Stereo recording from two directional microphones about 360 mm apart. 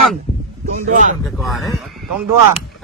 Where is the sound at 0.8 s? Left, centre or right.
Right.